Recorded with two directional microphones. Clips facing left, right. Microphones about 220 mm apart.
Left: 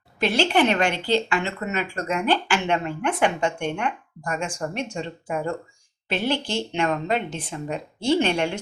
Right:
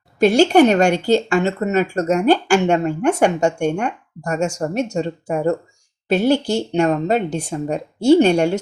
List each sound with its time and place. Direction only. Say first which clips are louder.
0.2 s a woman's voice: right 9 dB; 45° right (ahead or behind)